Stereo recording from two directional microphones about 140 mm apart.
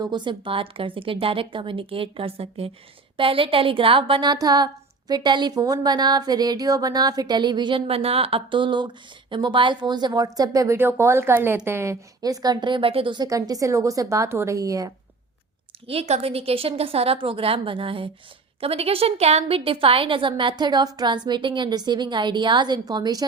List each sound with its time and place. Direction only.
0.0 s a woman's voice: 35° right (ahead or behind)
15.9 s a woman's voice: 45° right (ahead or behind); by 23.2 s 30° right (ahead or behind)